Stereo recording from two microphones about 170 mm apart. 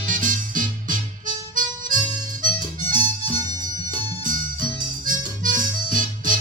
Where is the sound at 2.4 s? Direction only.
50° right (ahead or behind).